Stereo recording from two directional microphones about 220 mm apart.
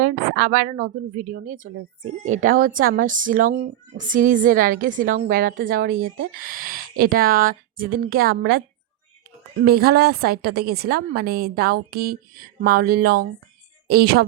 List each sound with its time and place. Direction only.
0.3 s a woman's voice: 40° right (ahead or behind)
9.6 s a woman's voice: 45° right (ahead or behind)